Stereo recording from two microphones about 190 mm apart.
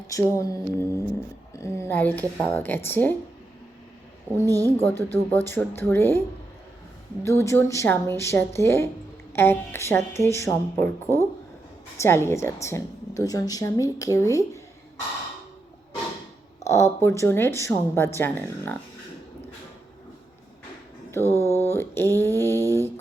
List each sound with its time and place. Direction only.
0.1 s a woman's voice: 15° left (ahead or behind)
4.4 s speech: 20° right (ahead or behind)
5.3 s a woman's voice: 10° left (ahead or behind)
16.6 s a woman's voice: 15° left (ahead or behind)
21.1 s a woman's voice: 15° left (ahead or behind)